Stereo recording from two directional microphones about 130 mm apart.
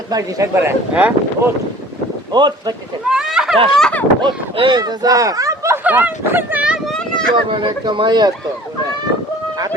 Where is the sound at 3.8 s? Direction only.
10° left (ahead or behind).